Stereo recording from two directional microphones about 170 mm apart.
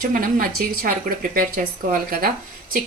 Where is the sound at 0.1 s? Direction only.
55° right (ahead or behind).